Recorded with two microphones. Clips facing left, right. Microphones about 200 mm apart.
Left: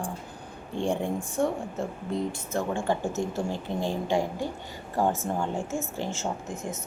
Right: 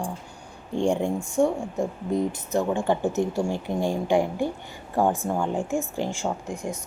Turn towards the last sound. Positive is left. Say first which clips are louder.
# right 3 dB
turn(degrees=-15)  # may be behind; listen again after turning